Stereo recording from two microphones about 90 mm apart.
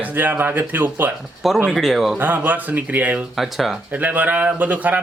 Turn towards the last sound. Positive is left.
turn(degrees=-20)  # may be behind; listen again after turning